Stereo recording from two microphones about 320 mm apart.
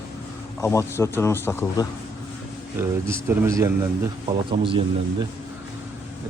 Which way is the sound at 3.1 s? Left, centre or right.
Centre.